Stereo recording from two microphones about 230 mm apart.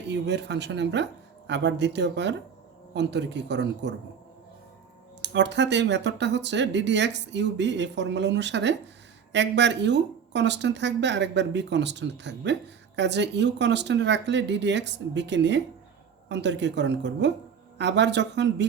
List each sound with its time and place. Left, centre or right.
0.1 s speech: right
5.2 s speech: right